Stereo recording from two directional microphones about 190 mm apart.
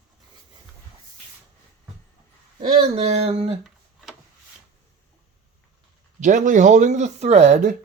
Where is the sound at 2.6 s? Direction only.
35° right (ahead or behind).